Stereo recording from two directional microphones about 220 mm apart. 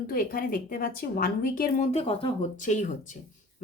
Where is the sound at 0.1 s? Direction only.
40° left (ahead or behind).